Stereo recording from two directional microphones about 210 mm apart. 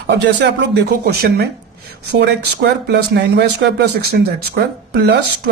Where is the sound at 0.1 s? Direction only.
55° right (ahead or behind).